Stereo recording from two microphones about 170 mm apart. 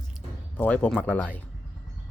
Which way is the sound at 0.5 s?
10° left (ahead or behind).